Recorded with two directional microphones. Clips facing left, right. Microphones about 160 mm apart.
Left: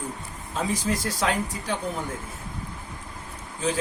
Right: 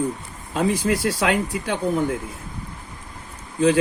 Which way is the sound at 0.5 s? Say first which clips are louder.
Right 6 dB; 60° right (ahead or behind).